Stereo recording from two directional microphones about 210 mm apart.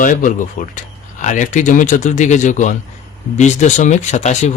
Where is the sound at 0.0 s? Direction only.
40° left (ahead or behind).